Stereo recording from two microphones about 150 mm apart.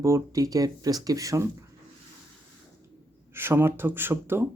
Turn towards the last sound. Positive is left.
turn(degrees=-15)  # may be behind; listen again after turning